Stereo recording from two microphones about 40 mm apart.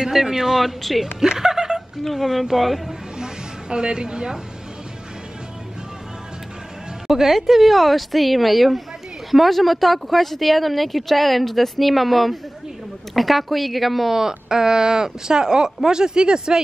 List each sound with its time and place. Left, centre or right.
0.0 s speech: centre
1.2 s chuckle: centre
2.0 s speech: centre
3.2 s snake: right
7.1 s speech: centre
14.1 s speech: centre